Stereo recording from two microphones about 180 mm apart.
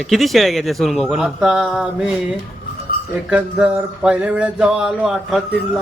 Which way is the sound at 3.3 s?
5° right (ahead or behind).